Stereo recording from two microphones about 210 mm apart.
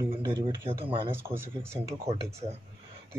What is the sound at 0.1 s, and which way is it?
Speech, 25° right (ahead or behind).